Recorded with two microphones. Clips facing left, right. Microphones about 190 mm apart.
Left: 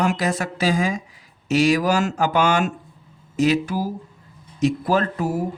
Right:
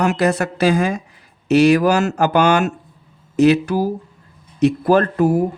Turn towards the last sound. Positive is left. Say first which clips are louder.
# right 7 dB
turn(degrees=-60)  # may be behind; listen again after turning